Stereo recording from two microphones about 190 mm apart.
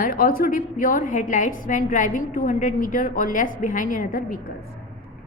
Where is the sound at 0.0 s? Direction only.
50° left (ahead or behind).